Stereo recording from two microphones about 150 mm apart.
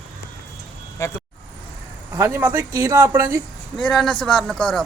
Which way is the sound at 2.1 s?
15° right (ahead or behind).